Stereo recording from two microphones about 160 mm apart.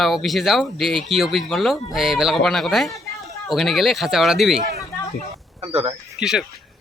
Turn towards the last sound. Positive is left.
turn(degrees=-5)  # may be behind; listen again after turning